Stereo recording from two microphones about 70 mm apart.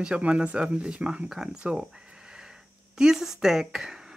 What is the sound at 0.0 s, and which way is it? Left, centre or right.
Speech, centre.